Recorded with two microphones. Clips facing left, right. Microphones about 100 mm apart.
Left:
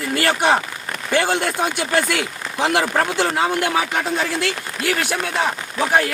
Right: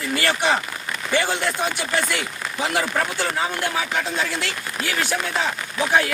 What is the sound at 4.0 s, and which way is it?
Speech, 50° left (ahead or behind).